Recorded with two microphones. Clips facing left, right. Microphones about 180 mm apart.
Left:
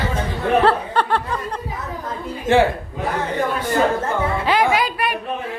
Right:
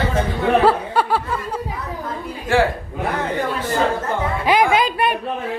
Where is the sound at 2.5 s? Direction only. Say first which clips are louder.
Left 2 dB; 20° left (ahead or behind).